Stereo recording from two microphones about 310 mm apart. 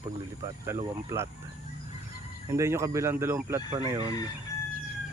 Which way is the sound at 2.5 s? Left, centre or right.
Centre.